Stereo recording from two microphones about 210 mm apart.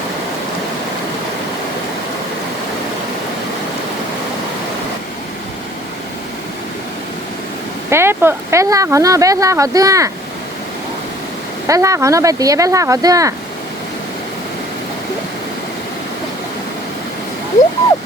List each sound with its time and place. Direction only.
7.9 s speech: 10° right (ahead or behind)
11.7 s speech: 15° right (ahead or behind)